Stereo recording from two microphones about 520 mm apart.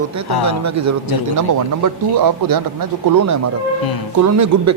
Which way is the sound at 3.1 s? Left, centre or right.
Right.